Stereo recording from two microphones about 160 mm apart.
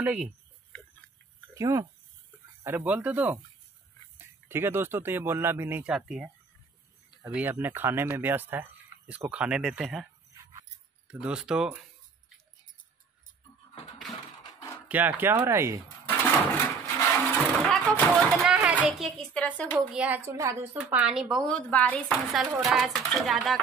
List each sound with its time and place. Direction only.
0.0 s speech: 10° right (ahead or behind)
1.5 s speech: 20° right (ahead or behind); by 10.0 s centre (ahead or behind)
11.1 s speech: 5° right (ahead or behind)
14.9 s speech: 10° right (ahead or behind)
16.1 s a sound: 15° left (ahead or behind)
17.6 s a child's voice: 5° left (ahead or behind)
19.9 s speech: 10° right (ahead or behind)
21.0 s speech: 5° right (ahead or behind)
21.5 s a woman's voice: 10° left (ahead or behind)
22.3 s speech: centre (ahead or behind)